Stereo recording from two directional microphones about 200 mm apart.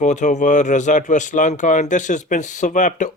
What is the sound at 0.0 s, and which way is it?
Speech, 35° left (ahead or behind).